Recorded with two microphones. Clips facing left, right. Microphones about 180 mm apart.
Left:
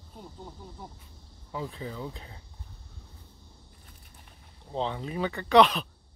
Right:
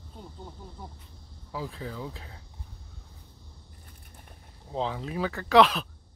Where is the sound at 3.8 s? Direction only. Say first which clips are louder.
Right 2 dB; 50° right (ahead or behind).